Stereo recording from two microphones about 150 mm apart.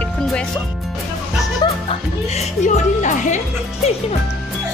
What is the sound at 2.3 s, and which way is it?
Speech, 55° left (ahead or behind).